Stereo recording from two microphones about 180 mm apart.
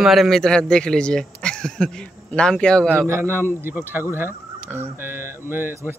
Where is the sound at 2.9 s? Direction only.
15° right (ahead or behind).